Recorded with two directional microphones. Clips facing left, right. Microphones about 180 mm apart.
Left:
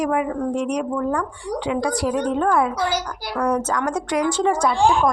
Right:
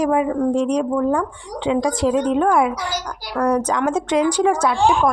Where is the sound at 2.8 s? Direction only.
55° left (ahead or behind).